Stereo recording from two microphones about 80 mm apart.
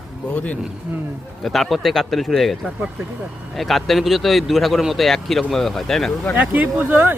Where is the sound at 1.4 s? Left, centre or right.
Centre.